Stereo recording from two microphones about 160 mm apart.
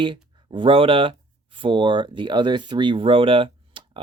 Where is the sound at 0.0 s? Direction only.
30° right (ahead or behind).